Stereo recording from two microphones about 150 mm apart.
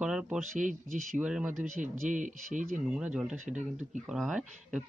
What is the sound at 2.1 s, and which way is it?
Speech, 60° right (ahead or behind).